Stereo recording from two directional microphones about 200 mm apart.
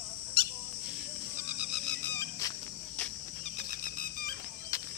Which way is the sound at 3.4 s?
45° left (ahead or behind).